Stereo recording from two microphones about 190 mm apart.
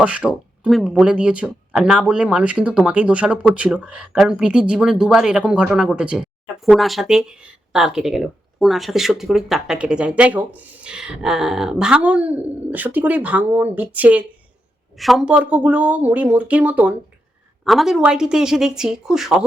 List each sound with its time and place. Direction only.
0.0 s speech: 5° right (ahead or behind)